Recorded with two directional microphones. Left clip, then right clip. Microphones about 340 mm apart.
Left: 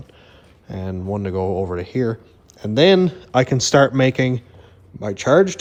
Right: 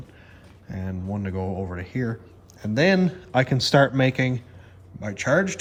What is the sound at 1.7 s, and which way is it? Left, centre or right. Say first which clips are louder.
Speech: left 8 dB; centre.